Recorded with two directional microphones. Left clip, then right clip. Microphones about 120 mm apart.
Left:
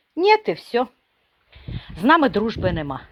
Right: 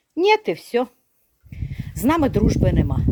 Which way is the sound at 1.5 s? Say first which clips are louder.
Right 1 dB; 35° right (ahead or behind).